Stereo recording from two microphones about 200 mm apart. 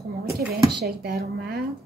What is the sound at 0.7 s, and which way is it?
Speech, 55° right (ahead or behind).